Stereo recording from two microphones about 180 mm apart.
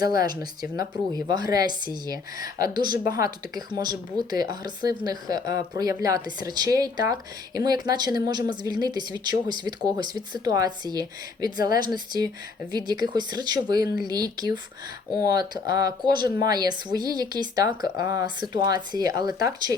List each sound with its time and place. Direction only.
0.3 s speech: 20° right (ahead or behind)